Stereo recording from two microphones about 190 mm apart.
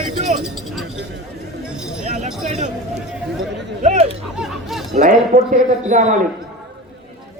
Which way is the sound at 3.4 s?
65° right (ahead or behind).